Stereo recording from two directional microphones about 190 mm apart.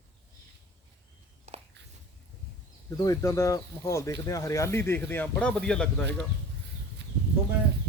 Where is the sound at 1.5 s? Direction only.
35° right (ahead or behind).